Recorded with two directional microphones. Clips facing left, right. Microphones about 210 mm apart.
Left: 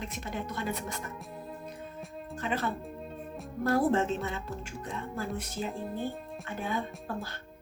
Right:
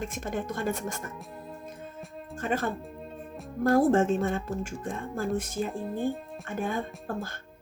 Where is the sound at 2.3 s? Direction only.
45° right (ahead or behind).